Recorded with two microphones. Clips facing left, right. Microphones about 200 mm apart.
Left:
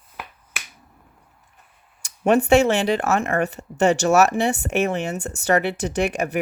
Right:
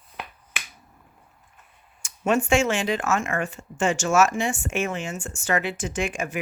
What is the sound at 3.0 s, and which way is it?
Speech, 60° left (ahead or behind).